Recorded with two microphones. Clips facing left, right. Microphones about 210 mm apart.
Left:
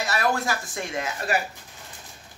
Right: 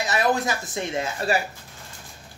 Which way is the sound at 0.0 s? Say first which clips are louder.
Right 2 dB; 20° right (ahead or behind).